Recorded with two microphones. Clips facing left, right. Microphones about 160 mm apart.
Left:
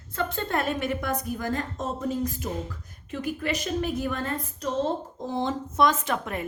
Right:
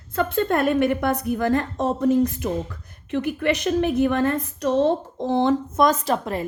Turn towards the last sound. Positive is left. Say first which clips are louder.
# right 6 dB
turn(degrees=-35)  # may be behind; listen again after turning